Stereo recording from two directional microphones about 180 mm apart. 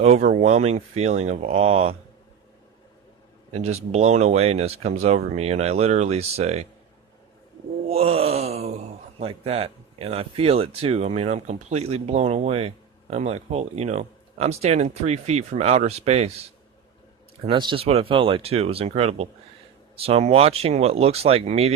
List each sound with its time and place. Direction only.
0.0 s speech: 40° right (ahead or behind)
3.5 s speech: 35° right (ahead or behind)
7.9 s speech: 35° right (ahead or behind)